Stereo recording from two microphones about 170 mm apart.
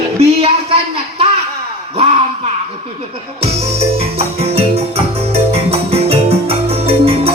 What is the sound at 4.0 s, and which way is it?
Music, 35° right (ahead or behind).